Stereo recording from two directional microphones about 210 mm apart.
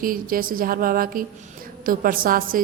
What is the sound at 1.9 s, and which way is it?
Speech, 40° right (ahead or behind).